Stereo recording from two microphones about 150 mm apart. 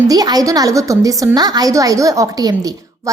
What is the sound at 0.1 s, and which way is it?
A woman's voice, 25° right (ahead or behind).